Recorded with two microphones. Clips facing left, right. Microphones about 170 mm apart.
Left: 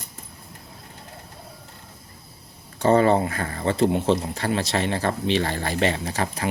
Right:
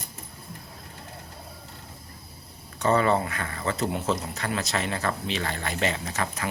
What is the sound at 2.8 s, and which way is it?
Speech, 30° left (ahead or behind).